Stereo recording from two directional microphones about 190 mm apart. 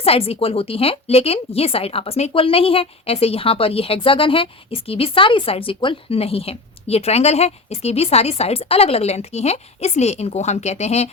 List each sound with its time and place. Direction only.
0.0 s a woman's voice: 30° left (ahead or behind)